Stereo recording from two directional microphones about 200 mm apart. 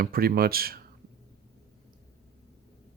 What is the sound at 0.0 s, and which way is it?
Speech, 50° right (ahead or behind).